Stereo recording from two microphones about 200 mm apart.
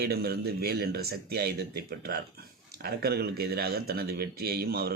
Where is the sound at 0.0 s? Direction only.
50° right (ahead or behind).